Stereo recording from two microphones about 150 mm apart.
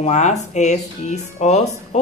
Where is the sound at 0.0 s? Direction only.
50° left (ahead or behind).